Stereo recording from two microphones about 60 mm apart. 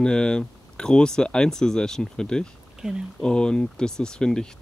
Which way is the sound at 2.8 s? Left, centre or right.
Centre.